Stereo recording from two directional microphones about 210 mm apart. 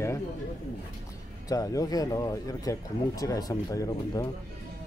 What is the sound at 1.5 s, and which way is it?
Speech, 15° left (ahead or behind).